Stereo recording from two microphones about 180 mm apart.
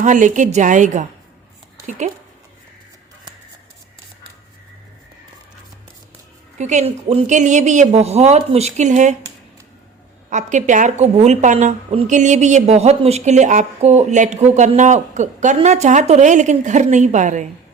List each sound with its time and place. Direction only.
0.0 s a woman's voice: 45° right (ahead or behind)
6.6 s speech: 40° right (ahead or behind)
10.2 s speech: 45° right (ahead or behind)